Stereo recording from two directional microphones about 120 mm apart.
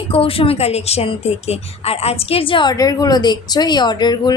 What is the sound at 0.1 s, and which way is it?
A woman's voice, 50° left (ahead or behind).